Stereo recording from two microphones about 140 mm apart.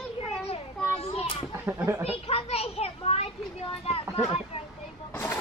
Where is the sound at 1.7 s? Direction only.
20° right (ahead or behind).